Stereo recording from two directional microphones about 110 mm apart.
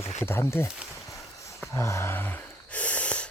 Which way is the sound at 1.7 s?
25° left (ahead or behind).